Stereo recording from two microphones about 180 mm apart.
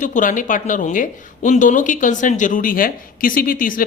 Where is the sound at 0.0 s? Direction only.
45° left (ahead or behind).